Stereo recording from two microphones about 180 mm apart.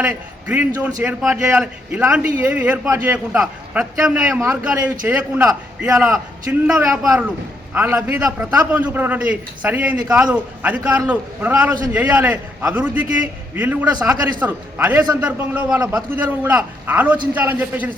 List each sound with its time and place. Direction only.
0.0 s a man's voice: 10° right (ahead or behind)